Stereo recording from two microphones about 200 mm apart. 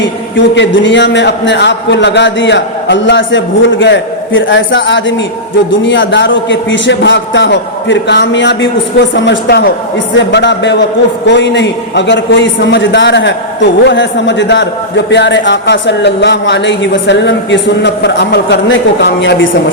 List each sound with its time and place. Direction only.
0.0 s a man's voice: 65° left (ahead or behind)